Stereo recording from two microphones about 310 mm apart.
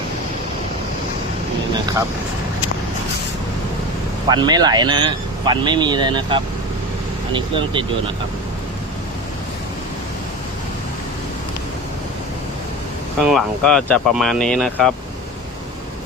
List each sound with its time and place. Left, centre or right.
4.3 s speech: centre
13.1 s speech: centre